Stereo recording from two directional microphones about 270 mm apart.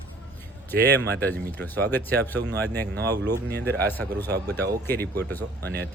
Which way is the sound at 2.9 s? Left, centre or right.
Right.